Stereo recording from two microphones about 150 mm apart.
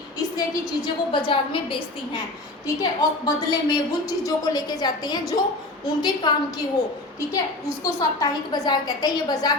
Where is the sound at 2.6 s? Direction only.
25° left (ahead or behind).